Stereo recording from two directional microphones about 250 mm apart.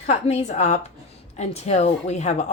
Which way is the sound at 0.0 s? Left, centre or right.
Left.